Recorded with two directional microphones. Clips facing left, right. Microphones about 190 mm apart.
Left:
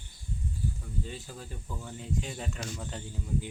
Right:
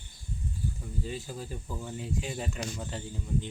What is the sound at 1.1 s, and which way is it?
Speech, 10° right (ahead or behind).